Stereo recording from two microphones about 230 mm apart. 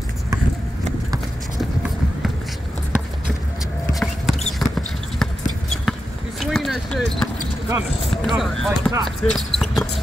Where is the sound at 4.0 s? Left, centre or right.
Centre.